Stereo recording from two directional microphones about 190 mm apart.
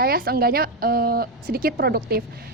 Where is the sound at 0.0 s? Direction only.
50° right (ahead or behind).